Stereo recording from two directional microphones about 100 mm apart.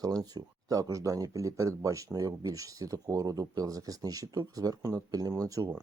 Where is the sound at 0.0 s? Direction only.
40° right (ahead or behind).